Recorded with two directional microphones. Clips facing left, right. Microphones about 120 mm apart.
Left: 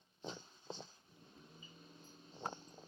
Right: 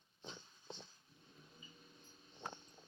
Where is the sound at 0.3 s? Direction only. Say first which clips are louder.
Left 5 dB; 35° left (ahead or behind).